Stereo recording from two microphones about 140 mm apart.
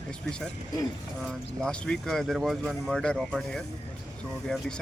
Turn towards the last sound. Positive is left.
turn(degrees=5)  # may be behind; listen again after turning